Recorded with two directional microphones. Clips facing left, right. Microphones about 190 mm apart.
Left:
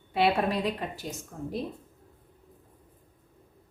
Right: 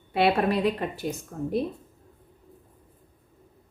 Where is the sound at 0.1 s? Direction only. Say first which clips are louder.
Right 3 dB; 60° right (ahead or behind).